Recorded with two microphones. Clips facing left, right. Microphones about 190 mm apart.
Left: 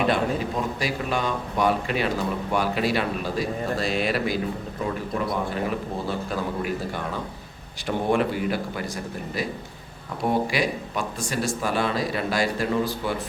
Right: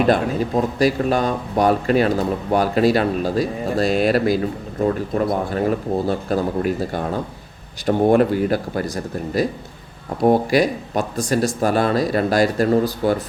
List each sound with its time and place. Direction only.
0.1 s speech: 40° right (ahead or behind)
10.2 s speech: 40° right (ahead or behind)